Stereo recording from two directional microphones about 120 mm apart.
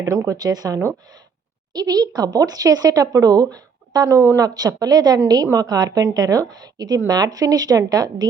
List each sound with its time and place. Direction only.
0.1 s speech: 25° right (ahead or behind)